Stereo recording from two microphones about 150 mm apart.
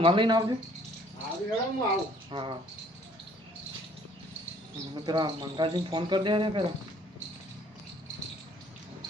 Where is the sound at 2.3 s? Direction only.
35° right (ahead or behind).